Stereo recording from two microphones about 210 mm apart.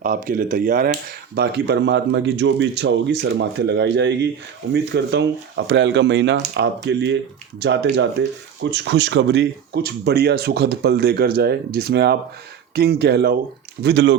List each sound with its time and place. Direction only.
0.0 s speech: 40° right (ahead or behind)
1.4 s speech: 50° right (ahead or behind)